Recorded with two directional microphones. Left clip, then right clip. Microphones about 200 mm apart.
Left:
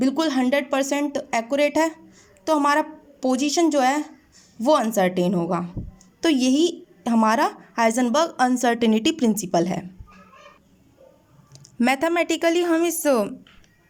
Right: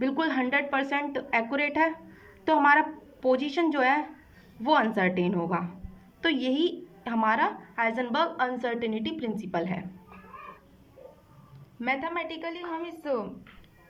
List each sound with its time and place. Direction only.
0.0 s a woman's voice: 25° left (ahead or behind)
11.8 s a woman's voice: 45° left (ahead or behind)